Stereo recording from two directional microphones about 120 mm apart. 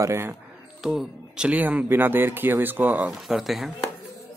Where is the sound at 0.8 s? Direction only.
5° right (ahead or behind).